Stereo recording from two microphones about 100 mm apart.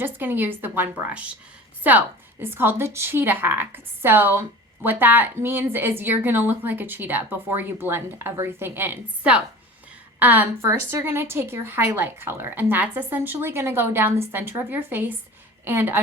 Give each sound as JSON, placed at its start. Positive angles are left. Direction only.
{"t": 0.0, "sound": "a woman's voice", "side_deg": -20}